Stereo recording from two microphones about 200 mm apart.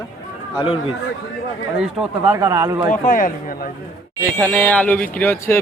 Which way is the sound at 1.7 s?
5° right (ahead or behind).